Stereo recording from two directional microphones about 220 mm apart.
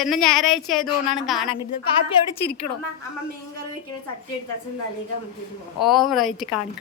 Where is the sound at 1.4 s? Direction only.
25° left (ahead or behind).